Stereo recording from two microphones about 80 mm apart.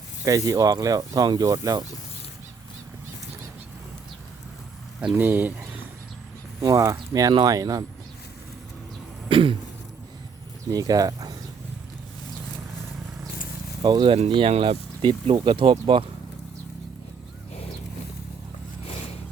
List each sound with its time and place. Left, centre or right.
0.3 s speech: right
5.1 s speech: right
6.6 s speech: right
9.3 s speech: right
10.7 s speech: right
13.8 s speech: right